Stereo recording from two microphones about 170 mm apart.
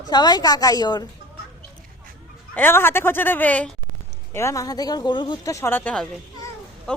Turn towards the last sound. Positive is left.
turn(degrees=10)  # may be behind; listen again after turning